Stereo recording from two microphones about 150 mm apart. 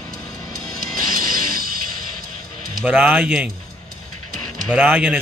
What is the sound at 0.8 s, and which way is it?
Music, 70° right (ahead or behind).